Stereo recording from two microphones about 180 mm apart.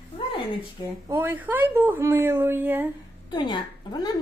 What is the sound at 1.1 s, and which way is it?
Speech, 10° right (ahead or behind).